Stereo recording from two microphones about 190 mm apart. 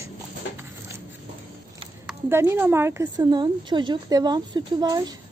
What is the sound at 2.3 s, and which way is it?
A woman's voice, 10° right (ahead or behind).